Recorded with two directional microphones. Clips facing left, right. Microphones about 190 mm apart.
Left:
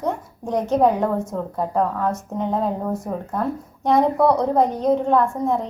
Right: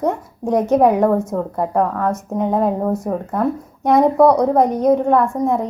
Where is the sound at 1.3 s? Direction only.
65° right (ahead or behind).